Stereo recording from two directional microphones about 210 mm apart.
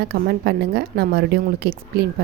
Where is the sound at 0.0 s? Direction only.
50° right (ahead or behind).